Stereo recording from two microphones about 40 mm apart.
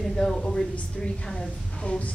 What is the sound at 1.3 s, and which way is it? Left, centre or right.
Speech, centre.